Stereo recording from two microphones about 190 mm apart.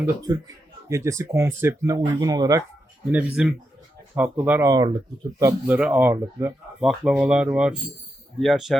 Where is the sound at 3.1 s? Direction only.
5° right (ahead or behind).